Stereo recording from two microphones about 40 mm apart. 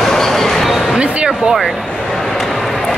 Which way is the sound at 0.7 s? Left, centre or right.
Centre.